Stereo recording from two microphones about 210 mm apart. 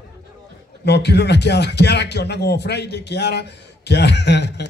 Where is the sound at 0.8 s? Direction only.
55° left (ahead or behind).